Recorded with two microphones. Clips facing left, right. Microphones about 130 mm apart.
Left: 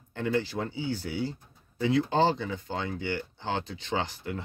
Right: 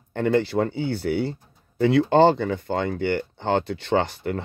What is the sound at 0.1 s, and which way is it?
Speech, 60° right (ahead or behind).